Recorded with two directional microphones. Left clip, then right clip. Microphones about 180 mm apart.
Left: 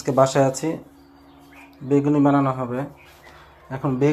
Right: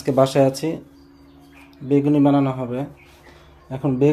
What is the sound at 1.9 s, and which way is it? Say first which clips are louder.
Speech: right 1 dB; 30° right (ahead or behind).